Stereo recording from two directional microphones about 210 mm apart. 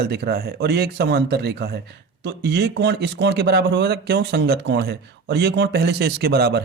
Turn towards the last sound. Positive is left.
turn(degrees=-50)  # may be behind; listen again after turning